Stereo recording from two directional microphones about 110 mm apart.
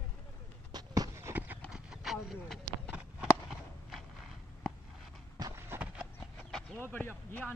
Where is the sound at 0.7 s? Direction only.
35° right (ahead or behind).